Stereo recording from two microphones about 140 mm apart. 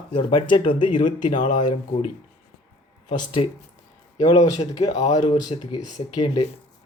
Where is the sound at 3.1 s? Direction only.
35° left (ahead or behind).